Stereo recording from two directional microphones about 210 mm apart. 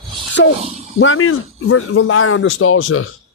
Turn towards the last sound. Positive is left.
turn(degrees=75)  # may be behind; listen again after turning